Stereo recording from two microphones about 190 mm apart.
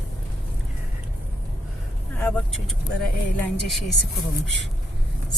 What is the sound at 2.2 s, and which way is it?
Speech, 5° left (ahead or behind).